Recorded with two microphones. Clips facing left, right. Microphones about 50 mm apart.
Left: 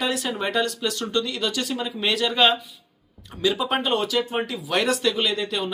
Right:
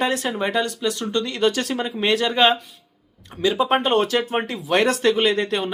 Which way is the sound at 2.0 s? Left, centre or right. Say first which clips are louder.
Right 2 dB; right.